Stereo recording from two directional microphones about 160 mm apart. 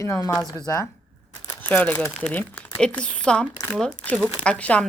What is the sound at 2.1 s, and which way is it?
A woman's voice, 5° left (ahead or behind).